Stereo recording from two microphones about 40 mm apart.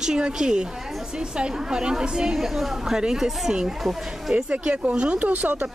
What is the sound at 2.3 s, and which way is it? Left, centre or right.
Speech, centre.